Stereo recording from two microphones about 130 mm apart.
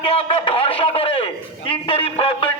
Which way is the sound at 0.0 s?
40° left (ahead or behind).